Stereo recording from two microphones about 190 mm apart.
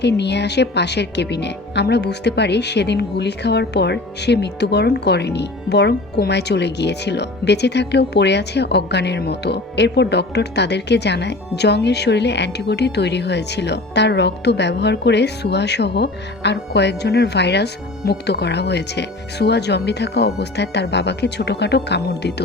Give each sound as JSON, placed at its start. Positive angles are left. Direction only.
{"t": 0.0, "sound": "speech", "side_deg": 65}